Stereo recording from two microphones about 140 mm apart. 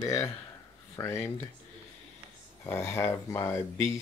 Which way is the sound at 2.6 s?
20° left (ahead or behind).